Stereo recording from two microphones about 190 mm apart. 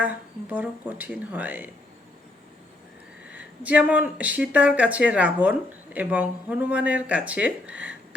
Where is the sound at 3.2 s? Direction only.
5° right (ahead or behind).